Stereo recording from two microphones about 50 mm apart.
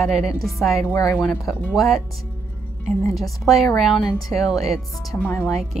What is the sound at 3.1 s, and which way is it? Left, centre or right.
A woman's voice, centre.